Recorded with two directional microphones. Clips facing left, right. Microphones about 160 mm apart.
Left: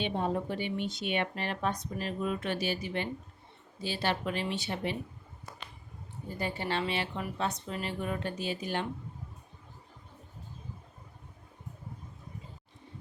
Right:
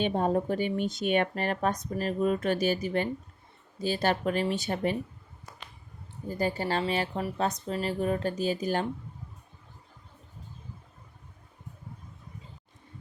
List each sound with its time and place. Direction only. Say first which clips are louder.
0.0 s speech: right 5 dB; 45° right (ahead or behind)
6.2 s speech: right 5 dB; 40° right (ahead or behind)